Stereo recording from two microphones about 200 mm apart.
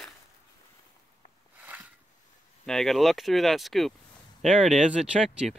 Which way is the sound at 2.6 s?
Centre (ahead or behind).